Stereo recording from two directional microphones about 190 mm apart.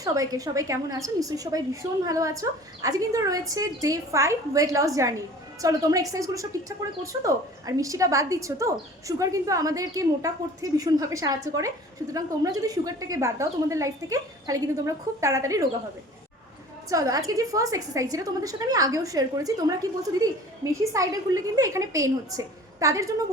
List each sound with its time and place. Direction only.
0.0 s a woman's voice: 20° right (ahead or behind)
16.9 s a woman's voice: 20° right (ahead or behind)